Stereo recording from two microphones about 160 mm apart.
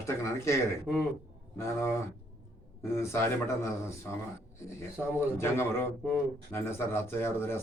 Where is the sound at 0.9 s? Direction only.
5° right (ahead or behind).